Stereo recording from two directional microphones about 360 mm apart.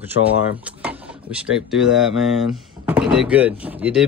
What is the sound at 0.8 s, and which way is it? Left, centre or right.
Speech, centre.